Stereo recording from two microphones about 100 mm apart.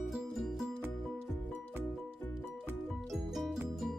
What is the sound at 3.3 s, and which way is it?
Music, 5° right (ahead or behind).